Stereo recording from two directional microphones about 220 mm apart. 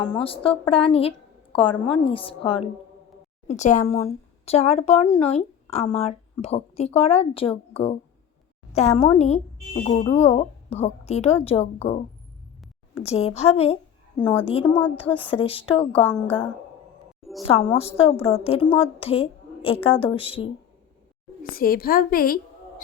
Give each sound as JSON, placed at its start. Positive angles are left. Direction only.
{"t": 0.0, "sound": "a woman's voice", "side_deg": 25}
{"t": 12.9, "sound": "a woman's voice", "side_deg": 30}
{"t": 16.0, "sound": "a woman's voice", "side_deg": 10}
{"t": 17.5, "sound": "a woman's voice", "side_deg": 25}
{"t": 21.4, "sound": "a woman's voice", "side_deg": 40}